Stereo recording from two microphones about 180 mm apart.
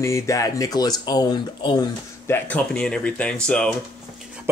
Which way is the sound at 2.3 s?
5° left (ahead or behind).